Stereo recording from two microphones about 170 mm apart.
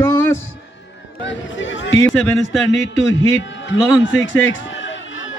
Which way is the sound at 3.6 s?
90° left.